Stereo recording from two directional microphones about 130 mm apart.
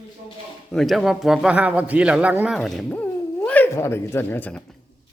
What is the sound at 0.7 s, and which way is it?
A man's voice, centre (ahead or behind).